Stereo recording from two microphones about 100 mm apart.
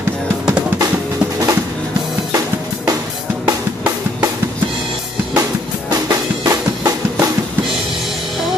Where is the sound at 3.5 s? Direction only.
35° right (ahead or behind).